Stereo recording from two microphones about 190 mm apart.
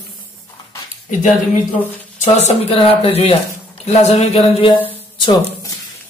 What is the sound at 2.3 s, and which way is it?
A man's voice, 35° left (ahead or behind).